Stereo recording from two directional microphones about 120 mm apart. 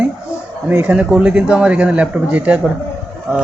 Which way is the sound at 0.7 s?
10° right (ahead or behind).